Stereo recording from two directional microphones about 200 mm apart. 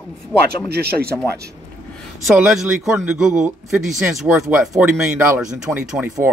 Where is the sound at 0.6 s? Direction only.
50° right (ahead or behind).